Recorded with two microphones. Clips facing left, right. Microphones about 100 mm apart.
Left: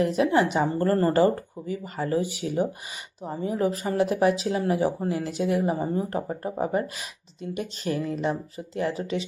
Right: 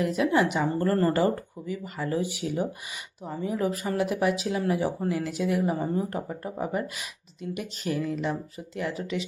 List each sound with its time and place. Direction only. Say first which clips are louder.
0.0 s speech: left 2 dB; 30° left (ahead or behind)
3.2 s speech: left 2 dB; 30° left (ahead or behind)